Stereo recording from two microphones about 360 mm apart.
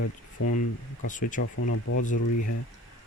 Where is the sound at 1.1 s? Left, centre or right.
Left.